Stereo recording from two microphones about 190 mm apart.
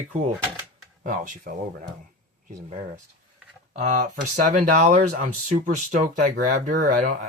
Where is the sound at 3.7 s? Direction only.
45° right (ahead or behind).